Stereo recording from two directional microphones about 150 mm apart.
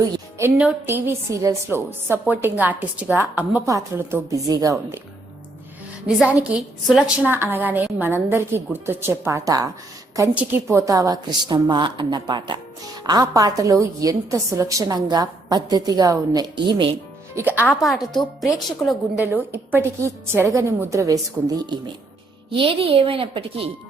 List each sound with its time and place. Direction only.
0.3 s a woman's voice: 15° right (ahead or behind)
6.1 s a woman's voice: 10° right (ahead or behind)
7.3 s a woman's voice: 15° right (ahead or behind); by 16.9 s 30° right (ahead or behind)
17.6 s a woman's voice: centre (ahead or behind)
19.2 s a woman's voice: 15° right (ahead or behind); by 23.7 s 40° right (ahead or behind)